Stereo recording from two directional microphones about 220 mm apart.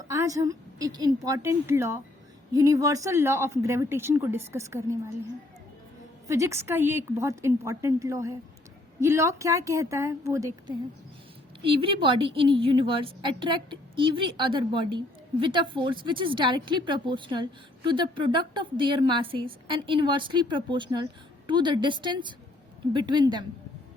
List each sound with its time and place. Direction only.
0.1 s a woman's voice: 15° right (ahead or behind)
6.2 s a woman's voice: 15° right (ahead or behind)